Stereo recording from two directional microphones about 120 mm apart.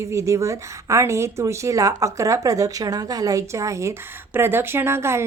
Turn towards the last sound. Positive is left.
turn(degrees=-20)  # may be behind; listen again after turning